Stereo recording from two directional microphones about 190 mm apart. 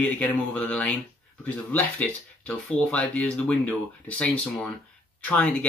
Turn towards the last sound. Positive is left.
turn(degrees=10)  # may be behind; listen again after turning